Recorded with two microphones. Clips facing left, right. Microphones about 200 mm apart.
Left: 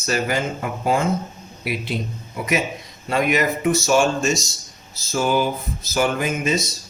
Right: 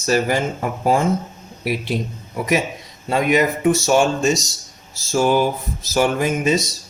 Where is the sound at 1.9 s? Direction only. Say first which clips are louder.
Right 2 dB; 45° right (ahead or behind).